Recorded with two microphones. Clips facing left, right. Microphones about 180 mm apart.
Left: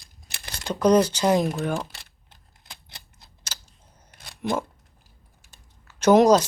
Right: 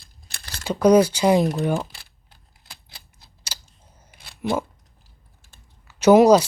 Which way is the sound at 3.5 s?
10° right (ahead or behind).